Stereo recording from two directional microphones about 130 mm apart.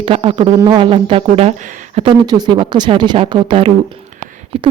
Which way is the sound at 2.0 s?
35° right (ahead or behind).